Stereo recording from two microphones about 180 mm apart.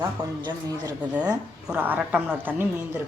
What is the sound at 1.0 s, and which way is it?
A woman's voice, 5° right (ahead or behind).